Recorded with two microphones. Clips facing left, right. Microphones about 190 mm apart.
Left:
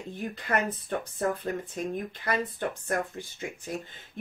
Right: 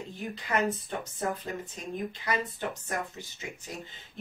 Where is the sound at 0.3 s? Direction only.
55° left (ahead or behind).